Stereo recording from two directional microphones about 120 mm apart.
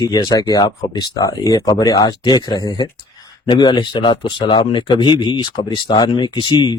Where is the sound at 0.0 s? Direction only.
30° left (ahead or behind).